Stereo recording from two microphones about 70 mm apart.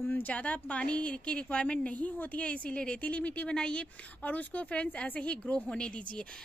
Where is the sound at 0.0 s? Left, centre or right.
Left.